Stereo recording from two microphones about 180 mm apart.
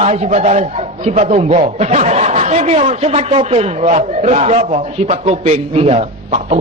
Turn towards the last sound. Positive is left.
turn(degrees=-40)  # may be behind; listen again after turning